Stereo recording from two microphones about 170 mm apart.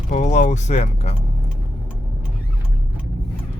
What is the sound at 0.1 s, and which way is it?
Speech, 40° left (ahead or behind).